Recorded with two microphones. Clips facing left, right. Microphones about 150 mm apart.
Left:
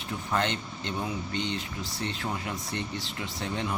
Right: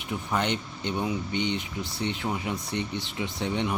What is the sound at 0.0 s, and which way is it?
Speech, 15° right (ahead or behind).